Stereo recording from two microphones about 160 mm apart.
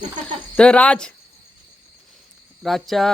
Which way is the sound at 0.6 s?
5° left (ahead or behind).